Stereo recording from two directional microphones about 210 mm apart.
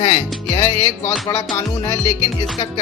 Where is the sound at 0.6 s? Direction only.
10° left (ahead or behind).